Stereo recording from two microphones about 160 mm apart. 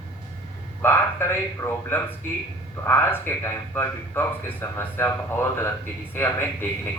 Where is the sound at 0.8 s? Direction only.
15° left (ahead or behind).